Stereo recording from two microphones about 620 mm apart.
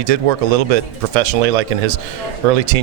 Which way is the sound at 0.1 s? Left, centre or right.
Right.